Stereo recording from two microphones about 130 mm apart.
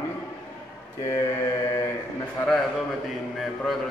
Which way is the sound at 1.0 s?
20° left (ahead or behind).